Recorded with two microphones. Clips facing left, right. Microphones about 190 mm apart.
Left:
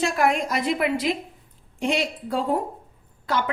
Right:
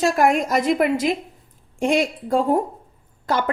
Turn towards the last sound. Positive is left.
turn(degrees=-45)  # may be behind; listen again after turning